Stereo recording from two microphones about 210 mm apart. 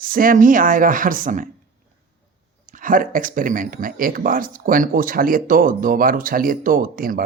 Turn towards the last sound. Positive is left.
turn(degrees=-45)  # may be behind; listen again after turning